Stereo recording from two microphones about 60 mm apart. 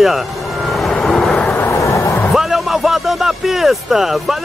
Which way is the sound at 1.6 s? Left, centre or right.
Left.